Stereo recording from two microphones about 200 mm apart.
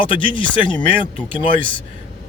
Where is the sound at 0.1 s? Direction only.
25° left (ahead or behind).